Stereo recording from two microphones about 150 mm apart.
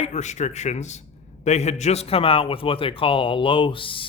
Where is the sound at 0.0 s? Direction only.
50° left (ahead or behind).